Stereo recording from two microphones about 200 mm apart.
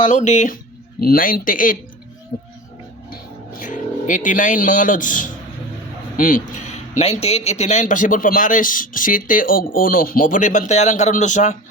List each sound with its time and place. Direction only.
0.0 s speech: 35° left (ahead or behind)
3.6 s speech: 40° left (ahead or behind)